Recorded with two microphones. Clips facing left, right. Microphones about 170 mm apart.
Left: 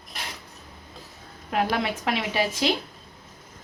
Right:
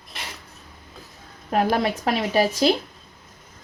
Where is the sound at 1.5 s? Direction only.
40° right (ahead or behind).